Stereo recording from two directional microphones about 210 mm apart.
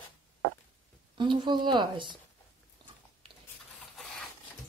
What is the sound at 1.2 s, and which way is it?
Speech, 20° right (ahead or behind).